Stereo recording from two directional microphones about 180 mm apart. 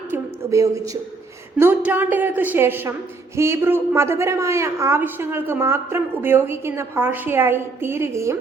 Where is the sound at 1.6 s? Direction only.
10° right (ahead or behind).